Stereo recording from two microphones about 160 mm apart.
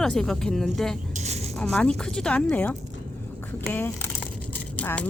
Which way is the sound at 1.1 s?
45° right (ahead or behind).